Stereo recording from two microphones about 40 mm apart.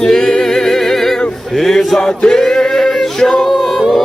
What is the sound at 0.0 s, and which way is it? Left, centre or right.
A capella, centre.